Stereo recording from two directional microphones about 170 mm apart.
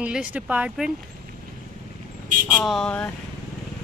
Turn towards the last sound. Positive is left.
turn(degrees=5)  # may be behind; listen again after turning